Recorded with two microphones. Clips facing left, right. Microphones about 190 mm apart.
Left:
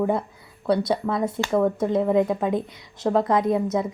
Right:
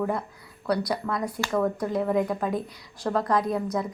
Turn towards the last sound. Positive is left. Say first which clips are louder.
# left 4 dB
turn(degrees=25)  # may be behind; listen again after turning